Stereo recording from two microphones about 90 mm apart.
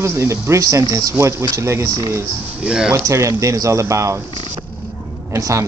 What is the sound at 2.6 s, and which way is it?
Speech, 10° right (ahead or behind).